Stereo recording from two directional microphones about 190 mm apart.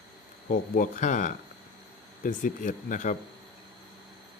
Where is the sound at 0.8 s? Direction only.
40° left (ahead or behind).